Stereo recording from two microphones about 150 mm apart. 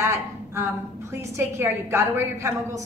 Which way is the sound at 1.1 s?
20° right (ahead or behind).